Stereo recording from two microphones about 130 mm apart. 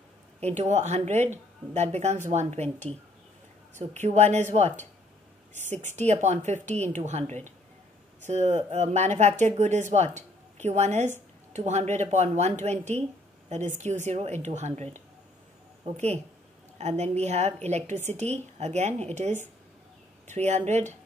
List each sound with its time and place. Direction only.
0.4 s speech: 60° right (ahead or behind)
16.7 s a woman's voice: 60° right (ahead or behind)